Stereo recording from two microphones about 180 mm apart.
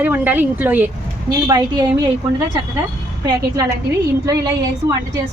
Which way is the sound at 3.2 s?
20° right (ahead or behind).